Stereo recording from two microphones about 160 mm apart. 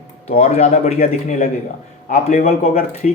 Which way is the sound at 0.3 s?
40° left (ahead or behind).